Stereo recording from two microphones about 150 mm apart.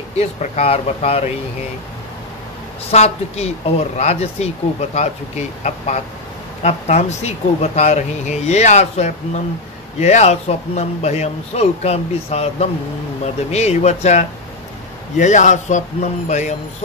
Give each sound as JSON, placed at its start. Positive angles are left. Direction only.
{"t": 0.2, "sound": "speech", "side_deg": 45}
{"t": 2.9, "sound": "speech", "side_deg": 45}